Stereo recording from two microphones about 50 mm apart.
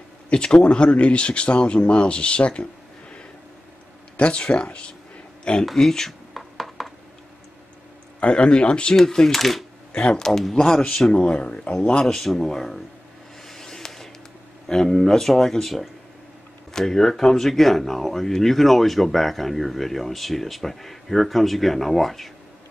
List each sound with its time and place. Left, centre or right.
0.3 s speech: centre
4.2 s speech: left
5.7 s a sound: centre
8.2 s speech: left
11.1 s speech: left
13.5 s a sound: centre
14.7 s speech: centre